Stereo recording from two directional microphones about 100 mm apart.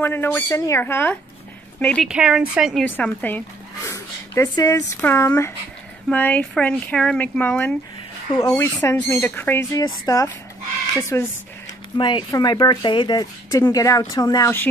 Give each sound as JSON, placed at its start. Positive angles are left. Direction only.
{"t": 0.0, "sound": "speech", "side_deg": 20}
{"t": 2.0, "sound": "speech", "side_deg": -5}
{"t": 2.8, "sound": "speech", "side_deg": 15}
{"t": 3.8, "sound": "a sound", "side_deg": 30}
{"t": 5.0, "sound": "speech", "side_deg": 25}
{"t": 8.4, "sound": "speech", "side_deg": 30}
{"t": 9.7, "sound": "speech", "side_deg": 35}
{"t": 12.0, "sound": "speech", "side_deg": 50}
{"t": 12.3, "sound": "speech", "side_deg": 40}